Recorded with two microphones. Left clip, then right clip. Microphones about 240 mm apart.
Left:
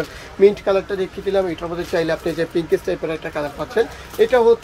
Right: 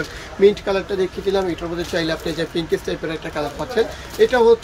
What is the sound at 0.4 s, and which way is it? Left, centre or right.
Speech, centre.